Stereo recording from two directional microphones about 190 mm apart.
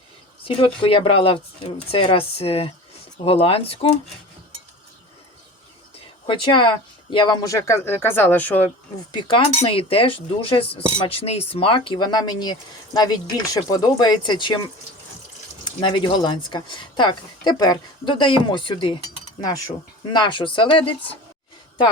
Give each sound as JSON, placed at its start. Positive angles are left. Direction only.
{"t": 0.4, "sound": "speech", "side_deg": 30}
{"t": 6.2, "sound": "speech", "side_deg": 25}
{"t": 9.1, "sound": "speech", "side_deg": 25}
{"t": 20.1, "sound": "speech", "side_deg": 25}